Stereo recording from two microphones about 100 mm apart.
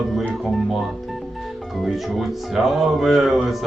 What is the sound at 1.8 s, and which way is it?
A man's voice, centre (ahead or behind).